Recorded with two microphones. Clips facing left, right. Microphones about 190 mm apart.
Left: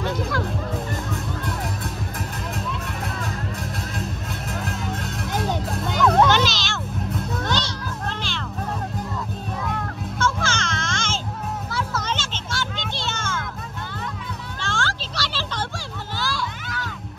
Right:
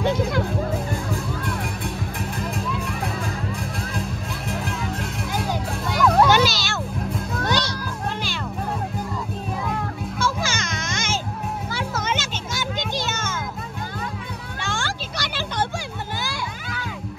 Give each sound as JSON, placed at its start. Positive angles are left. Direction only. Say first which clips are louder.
{"t": 2.5, "sound": "music", "louder": "right 2 dB", "side_deg": 0}
{"t": 4.5, "sound": "music", "louder": "right 1 dB", "side_deg": 0}
{"t": 9.7, "sound": "music", "louder": "right 1 dB", "side_deg": -10}
{"t": 14.6, "sound": "a sound", "louder": "left 1 dB", "side_deg": -15}